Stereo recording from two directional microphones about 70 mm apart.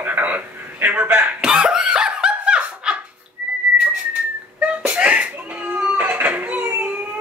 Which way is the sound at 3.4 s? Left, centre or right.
Right.